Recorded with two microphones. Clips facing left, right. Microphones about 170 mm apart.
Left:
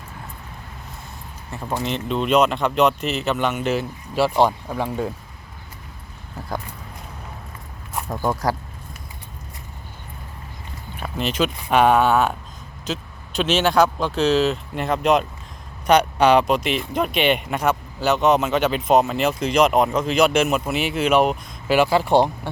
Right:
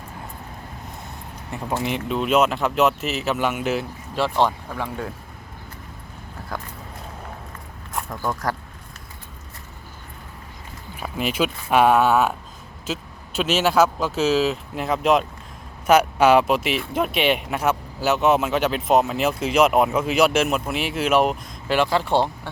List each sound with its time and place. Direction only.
1.8 s speech: 10° right (ahead or behind); by 5.1 s 15° left (ahead or behind)
8.1 s speech: 25° left (ahead or behind)
11.0 s speech: 10° right (ahead or behind); by 22.3 s 15° left (ahead or behind)